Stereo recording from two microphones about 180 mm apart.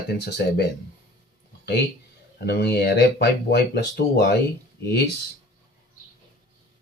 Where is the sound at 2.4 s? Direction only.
65° left (ahead or behind).